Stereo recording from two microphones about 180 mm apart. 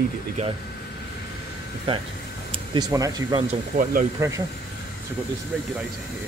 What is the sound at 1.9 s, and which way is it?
Speech, 30° right (ahead or behind).